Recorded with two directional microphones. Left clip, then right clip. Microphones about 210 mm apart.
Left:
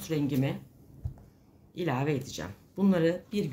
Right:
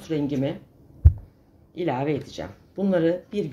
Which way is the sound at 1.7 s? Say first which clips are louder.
Right 5 dB; 50° left (ahead or behind).